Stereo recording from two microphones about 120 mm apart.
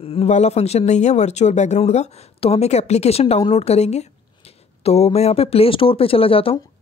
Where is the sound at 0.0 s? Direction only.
55° left (ahead or behind).